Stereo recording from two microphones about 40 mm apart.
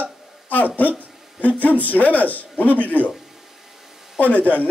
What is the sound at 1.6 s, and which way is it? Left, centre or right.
A man's voice, left.